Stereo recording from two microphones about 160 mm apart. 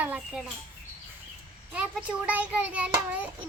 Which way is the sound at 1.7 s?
10° right (ahead or behind).